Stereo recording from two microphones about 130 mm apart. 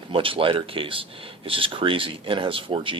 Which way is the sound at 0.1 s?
45° right (ahead or behind).